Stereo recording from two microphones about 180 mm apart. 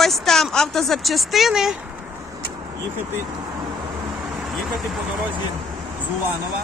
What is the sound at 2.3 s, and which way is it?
Vehicle, 20° right (ahead or behind).